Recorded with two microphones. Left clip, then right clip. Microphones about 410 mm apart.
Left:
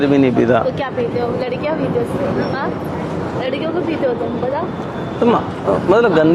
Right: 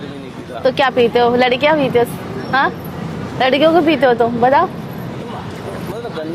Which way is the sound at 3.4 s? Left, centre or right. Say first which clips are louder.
Right 11 dB; right.